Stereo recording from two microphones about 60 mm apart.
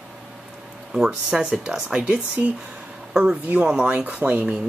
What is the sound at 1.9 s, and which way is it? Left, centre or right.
Speech, right.